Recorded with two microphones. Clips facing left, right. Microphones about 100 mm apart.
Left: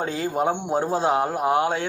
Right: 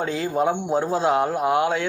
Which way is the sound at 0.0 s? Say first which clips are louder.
Right 1 dB; 35° left (ahead or behind).